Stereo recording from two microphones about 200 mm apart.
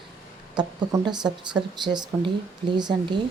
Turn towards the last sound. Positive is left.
turn(degrees=-20)  # may be behind; listen again after turning